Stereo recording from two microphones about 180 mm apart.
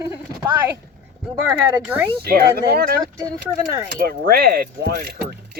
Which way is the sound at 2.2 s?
60° right (ahead or behind).